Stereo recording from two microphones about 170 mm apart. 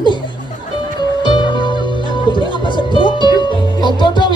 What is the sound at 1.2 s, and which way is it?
Music, 25° left (ahead or behind).